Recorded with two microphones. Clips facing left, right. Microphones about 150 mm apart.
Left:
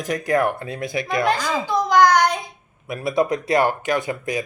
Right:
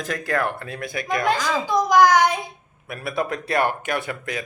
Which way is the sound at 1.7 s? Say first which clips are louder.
Even; 15° right (ahead or behind).